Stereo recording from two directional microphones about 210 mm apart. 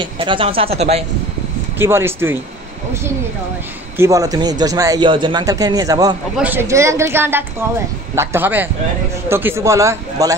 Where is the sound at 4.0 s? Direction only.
15° right (ahead or behind).